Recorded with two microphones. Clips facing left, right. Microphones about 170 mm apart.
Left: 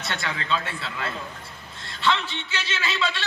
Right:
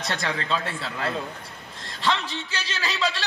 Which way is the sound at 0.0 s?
40° right (ahead or behind).